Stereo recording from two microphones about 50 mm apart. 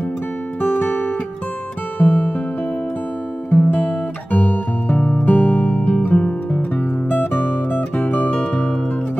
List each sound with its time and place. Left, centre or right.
0.7 s music: left
3.4 s guitar: left
6.0 s music: left